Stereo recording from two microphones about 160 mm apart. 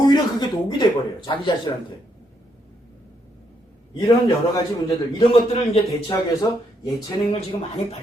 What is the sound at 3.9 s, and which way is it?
Speech, 25° left (ahead or behind).